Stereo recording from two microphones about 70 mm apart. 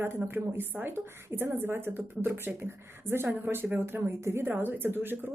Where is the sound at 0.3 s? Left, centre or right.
Right.